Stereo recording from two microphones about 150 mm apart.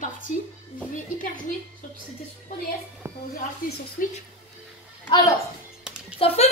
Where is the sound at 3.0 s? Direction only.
20° right (ahead or behind).